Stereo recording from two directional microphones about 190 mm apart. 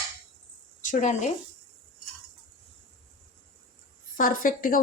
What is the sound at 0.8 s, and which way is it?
Speech, 40° left (ahead or behind).